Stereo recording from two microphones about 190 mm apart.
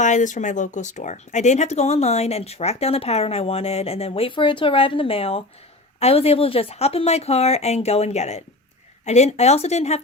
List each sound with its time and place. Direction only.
0.0 s speech: 40° left (ahead or behind)